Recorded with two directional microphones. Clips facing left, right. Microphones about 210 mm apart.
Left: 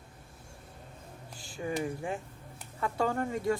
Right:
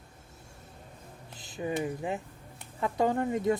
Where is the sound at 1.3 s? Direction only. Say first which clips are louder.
Right 2 dB; 20° right (ahead or behind).